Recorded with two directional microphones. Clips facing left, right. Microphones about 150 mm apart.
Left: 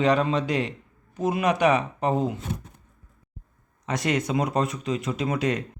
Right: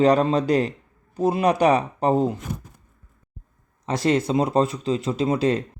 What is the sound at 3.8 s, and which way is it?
Speech, 30° right (ahead or behind).